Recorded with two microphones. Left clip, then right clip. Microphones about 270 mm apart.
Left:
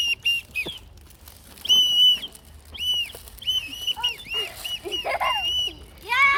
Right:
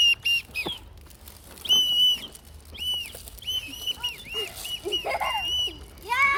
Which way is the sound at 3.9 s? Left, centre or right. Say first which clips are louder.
Left 3 dB; right.